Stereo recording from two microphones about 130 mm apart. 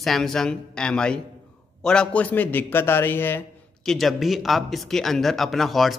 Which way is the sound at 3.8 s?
Centre (ahead or behind).